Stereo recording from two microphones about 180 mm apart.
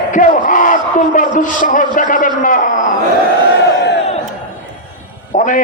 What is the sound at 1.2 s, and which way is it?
A man's voice, 45° left (ahead or behind).